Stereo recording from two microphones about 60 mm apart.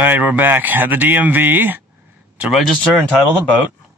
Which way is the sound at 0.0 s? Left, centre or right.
Right.